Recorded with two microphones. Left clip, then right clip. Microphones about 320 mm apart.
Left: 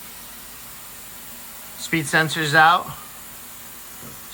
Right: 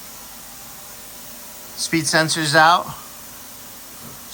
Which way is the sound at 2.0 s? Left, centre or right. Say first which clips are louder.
Right 1 dB; centre.